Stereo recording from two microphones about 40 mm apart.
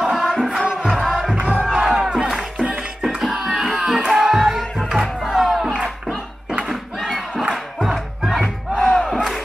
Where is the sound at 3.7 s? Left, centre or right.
Right.